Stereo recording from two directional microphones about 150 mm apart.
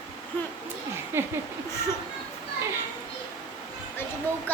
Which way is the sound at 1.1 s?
15° right (ahead or behind).